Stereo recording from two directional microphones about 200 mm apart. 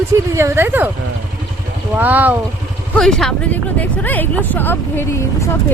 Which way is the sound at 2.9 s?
5° left (ahead or behind).